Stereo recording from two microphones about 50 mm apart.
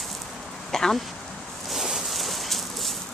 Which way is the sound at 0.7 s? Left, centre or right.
Centre.